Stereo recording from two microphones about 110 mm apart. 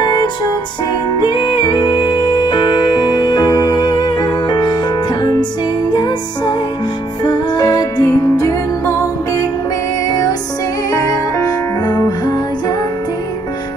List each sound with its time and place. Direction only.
0.0 s music: 40° left (ahead or behind)
5.9 s music: 40° left (ahead or behind)
10.9 s music: 35° left (ahead or behind)